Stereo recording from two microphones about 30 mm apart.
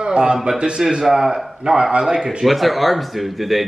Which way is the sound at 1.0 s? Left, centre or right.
Centre.